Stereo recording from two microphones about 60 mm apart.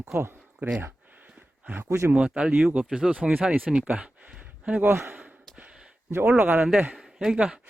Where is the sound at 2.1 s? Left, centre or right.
Centre.